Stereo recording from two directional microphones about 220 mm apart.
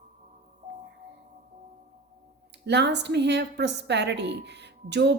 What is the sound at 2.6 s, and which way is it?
A woman's voice, 50° right (ahead or behind).